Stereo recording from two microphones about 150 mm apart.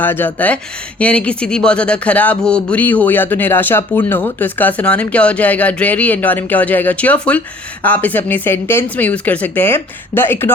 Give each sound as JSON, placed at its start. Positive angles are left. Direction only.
{"t": 0.0, "sound": "speech", "side_deg": 15}